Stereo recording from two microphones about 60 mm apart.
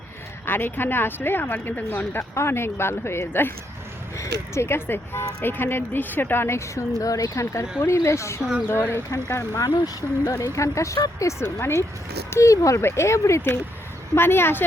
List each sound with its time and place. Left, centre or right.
0.4 s speech: left
2.3 s speech: left
6.7 s speech: left
7.8 s speech: left
8.7 s speech: left
9.0 s speech: left
10.4 s speech: left
11.4 s speech: left
12.4 s speech: left
14.2 s speech: left